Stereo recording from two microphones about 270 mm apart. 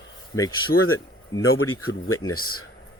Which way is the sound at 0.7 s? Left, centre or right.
Left.